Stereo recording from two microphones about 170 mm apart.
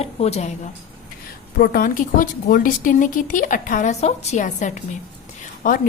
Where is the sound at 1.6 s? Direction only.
55° left (ahead or behind).